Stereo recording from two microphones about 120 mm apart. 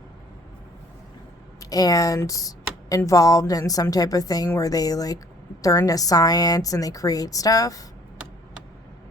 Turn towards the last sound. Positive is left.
turn(degrees=30)  # may be behind; listen again after turning